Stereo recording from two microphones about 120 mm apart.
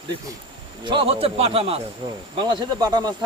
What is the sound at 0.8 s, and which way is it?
Speech, 50° right (ahead or behind).